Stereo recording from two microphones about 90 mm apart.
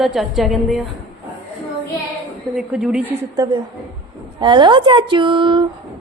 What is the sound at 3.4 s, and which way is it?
Speech, 50° right (ahead or behind).